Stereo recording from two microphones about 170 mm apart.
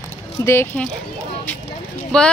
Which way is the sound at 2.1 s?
5° left (ahead or behind).